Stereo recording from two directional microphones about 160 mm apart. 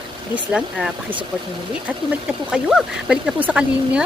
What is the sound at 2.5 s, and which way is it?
Speech, 5° right (ahead or behind).